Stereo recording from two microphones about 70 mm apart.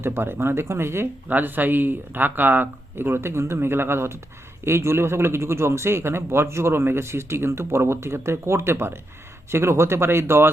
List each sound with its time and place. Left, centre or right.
0.0 s a man's voice: right
1.3 s a man's voice: right